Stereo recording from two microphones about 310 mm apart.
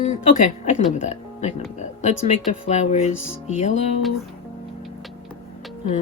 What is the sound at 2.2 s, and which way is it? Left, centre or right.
Speech, left.